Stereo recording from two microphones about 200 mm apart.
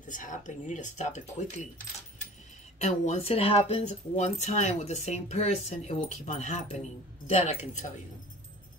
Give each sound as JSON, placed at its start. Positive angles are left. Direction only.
{"t": 0.0, "sound": "speech", "side_deg": 40}
{"t": 2.8, "sound": "speech", "side_deg": 35}